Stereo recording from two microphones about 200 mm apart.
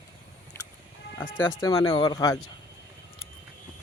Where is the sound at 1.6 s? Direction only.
20° left (ahead or behind).